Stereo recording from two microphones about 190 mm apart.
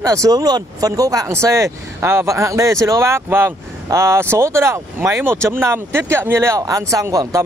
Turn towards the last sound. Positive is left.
turn(degrees=-15)  # may be behind; listen again after turning